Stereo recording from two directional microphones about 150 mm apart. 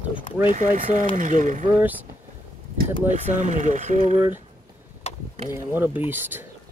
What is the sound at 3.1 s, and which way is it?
Speech, 55° right (ahead or behind).